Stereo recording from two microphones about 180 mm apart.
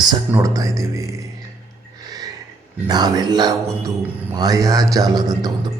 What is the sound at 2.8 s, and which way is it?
A man's voice, 25° right (ahead or behind).